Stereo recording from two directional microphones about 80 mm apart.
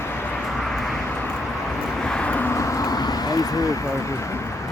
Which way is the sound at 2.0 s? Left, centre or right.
Centre.